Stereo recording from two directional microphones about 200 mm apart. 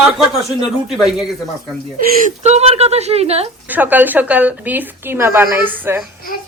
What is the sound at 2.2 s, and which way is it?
Speech, 35° right (ahead or behind).